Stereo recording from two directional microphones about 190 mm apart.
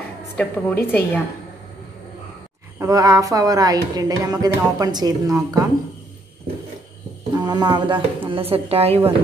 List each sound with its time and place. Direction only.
0.4 s a woman's voice: 10° left (ahead or behind)
2.8 s speech: 20° right (ahead or behind)
7.3 s speech: 20° right (ahead or behind)